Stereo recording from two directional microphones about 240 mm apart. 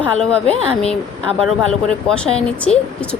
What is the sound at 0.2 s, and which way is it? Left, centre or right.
Speech, centre.